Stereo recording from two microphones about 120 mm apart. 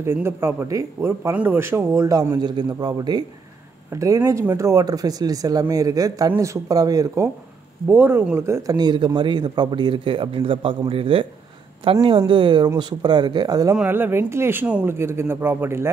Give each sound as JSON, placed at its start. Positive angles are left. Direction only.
{"t": 0.0, "sound": "speech", "side_deg": -20}
{"t": 1.3, "sound": "speech", "side_deg": -15}
{"t": 7.9, "sound": "speech", "side_deg": -15}
{"t": 13.8, "sound": "speech", "side_deg": -15}